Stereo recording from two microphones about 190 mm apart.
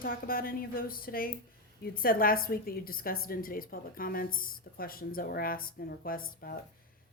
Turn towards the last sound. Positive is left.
turn(degrees=50)  # may be behind; listen again after turning